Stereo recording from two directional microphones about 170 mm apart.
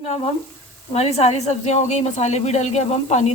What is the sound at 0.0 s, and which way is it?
Frying, 40° left (ahead or behind).